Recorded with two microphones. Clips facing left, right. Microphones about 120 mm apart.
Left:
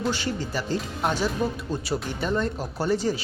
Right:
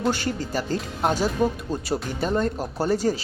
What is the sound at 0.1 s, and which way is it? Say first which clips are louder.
Speech: right 2 dB; 45° right (ahead or behind).